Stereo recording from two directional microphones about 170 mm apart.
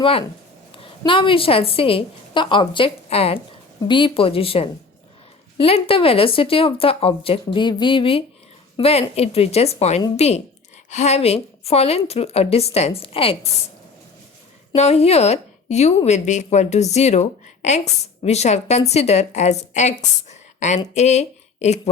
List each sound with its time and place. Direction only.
0.0 s a woman's voice: 35° left (ahead or behind)
14.8 s a woman's voice: 40° left (ahead or behind)